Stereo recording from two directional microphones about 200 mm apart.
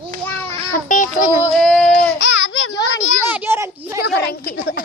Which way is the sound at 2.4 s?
90° left.